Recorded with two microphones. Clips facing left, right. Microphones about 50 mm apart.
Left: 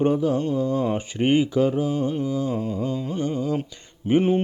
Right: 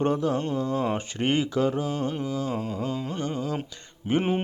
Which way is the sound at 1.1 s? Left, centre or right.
Centre.